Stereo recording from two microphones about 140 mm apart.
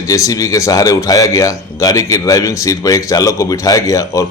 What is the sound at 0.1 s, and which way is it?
Speech, 25° left (ahead or behind).